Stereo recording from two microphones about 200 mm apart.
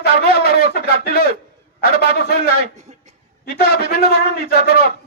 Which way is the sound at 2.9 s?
35° right (ahead or behind).